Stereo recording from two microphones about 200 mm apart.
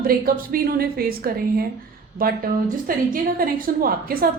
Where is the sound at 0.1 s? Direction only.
45° right (ahead or behind).